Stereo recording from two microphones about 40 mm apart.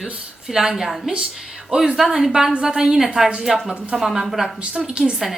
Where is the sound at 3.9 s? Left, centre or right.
Centre.